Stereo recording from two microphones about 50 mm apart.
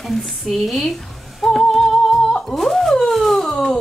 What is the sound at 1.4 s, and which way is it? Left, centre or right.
Music, centre.